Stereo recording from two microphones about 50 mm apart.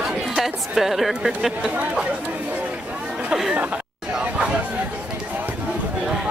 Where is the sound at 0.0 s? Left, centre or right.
Centre.